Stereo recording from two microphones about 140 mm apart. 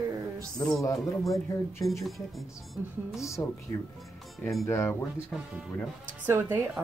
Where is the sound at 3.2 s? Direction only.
20° left (ahead or behind).